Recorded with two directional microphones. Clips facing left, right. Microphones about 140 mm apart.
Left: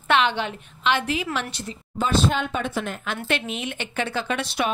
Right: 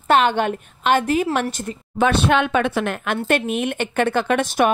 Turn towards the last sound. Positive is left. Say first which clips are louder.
# right 7 dB
turn(degrees=-50)  # may be behind; listen again after turning